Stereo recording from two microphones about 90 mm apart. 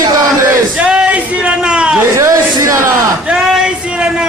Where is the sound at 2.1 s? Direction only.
35° right (ahead or behind).